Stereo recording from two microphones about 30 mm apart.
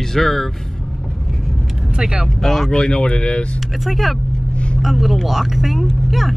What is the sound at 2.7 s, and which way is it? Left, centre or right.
Speech, left.